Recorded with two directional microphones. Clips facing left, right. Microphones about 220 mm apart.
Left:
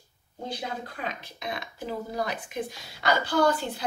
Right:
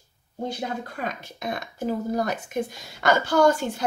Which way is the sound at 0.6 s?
50° right (ahead or behind).